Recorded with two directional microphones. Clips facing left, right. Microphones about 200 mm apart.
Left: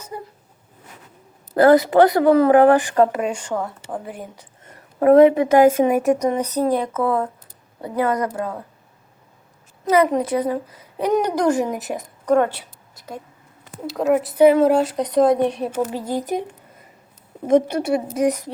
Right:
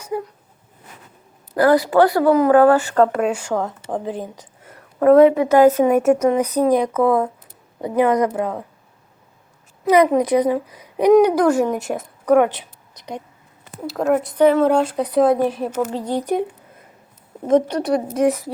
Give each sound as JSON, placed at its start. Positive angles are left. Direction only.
{"t": 1.5, "sound": "speech", "side_deg": 25}
{"t": 3.2, "sound": "a woman's voice", "side_deg": -5}
{"t": 5.0, "sound": "speech", "side_deg": 15}
{"t": 6.0, "sound": "a woman's voice", "side_deg": -5}
{"t": 9.8, "sound": "a woman's voice", "side_deg": -15}
{"t": 11.2, "sound": "speech", "side_deg": -5}
{"t": 13.8, "sound": "speech", "side_deg": 0}
{"t": 16.1, "sound": "a sound", "side_deg": 0}
{"t": 17.5, "sound": "speech", "side_deg": 10}